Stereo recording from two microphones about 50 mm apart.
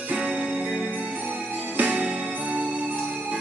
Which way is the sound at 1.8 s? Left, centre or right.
Right.